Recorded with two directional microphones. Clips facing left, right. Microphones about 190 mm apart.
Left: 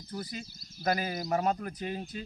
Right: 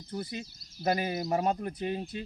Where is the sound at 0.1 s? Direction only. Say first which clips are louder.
Right 2 dB; 20° right (ahead or behind).